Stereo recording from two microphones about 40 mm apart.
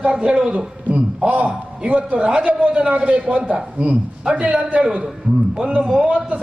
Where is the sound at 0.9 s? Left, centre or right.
Right.